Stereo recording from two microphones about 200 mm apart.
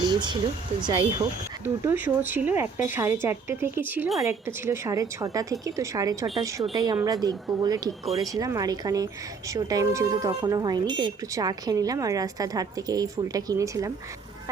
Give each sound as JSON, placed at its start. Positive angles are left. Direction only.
{"t": 0.1, "sound": "speech", "side_deg": -20}
{"t": 1.6, "sound": "speech", "side_deg": -10}